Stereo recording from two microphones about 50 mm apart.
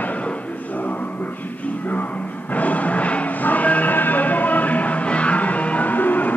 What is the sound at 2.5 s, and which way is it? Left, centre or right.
Music, left.